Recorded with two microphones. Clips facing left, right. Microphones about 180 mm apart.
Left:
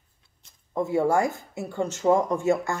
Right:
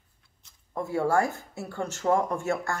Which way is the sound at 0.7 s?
20° left (ahead or behind).